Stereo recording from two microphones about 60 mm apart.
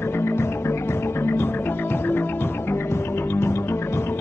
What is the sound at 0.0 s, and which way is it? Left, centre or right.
Music, left.